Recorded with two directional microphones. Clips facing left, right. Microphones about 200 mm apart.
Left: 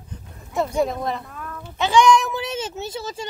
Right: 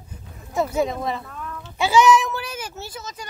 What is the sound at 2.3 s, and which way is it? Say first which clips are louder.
Speech: left 4 dB; 25° left (ahead or behind).